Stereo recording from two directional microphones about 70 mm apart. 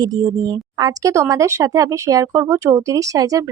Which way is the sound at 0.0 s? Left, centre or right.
Right.